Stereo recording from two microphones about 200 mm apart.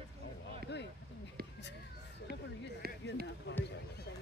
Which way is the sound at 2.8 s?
50° right (ahead or behind).